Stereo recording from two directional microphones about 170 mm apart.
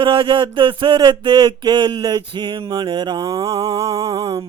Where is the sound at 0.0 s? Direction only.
30° right (ahead or behind).